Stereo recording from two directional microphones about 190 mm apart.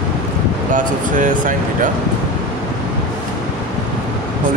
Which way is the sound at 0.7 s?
45° right (ahead or behind).